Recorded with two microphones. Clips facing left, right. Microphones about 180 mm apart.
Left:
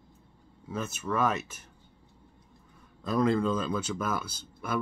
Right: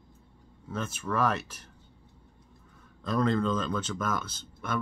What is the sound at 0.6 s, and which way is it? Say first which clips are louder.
Speech: left 1 dB; 5° left (ahead or behind).